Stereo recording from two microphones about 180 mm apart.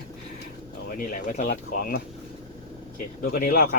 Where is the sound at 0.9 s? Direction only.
45° left (ahead or behind).